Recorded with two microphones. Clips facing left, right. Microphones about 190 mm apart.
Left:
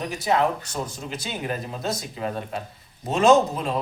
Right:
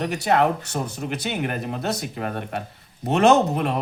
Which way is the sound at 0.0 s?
65° right (ahead or behind).